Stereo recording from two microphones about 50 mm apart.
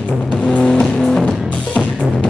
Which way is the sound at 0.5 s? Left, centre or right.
Left.